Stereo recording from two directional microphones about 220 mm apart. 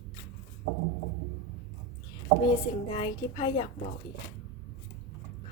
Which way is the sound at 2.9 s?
20° left (ahead or behind).